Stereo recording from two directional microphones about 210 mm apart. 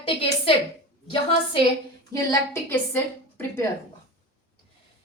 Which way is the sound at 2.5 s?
10° left (ahead or behind).